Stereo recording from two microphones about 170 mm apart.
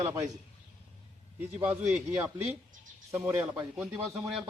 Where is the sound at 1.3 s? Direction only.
10° right (ahead or behind).